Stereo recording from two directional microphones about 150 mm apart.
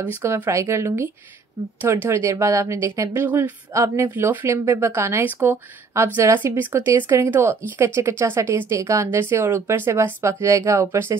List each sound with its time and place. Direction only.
0.0 s a woman's voice: 15° right (ahead or behind)